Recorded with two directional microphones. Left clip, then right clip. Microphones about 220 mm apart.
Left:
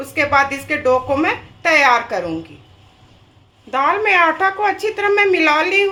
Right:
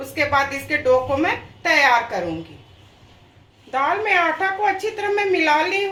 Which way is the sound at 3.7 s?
50° left (ahead or behind).